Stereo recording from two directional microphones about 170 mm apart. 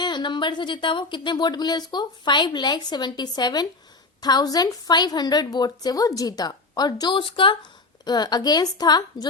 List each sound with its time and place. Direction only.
0.0 s a woman's voice: 25° left (ahead or behind)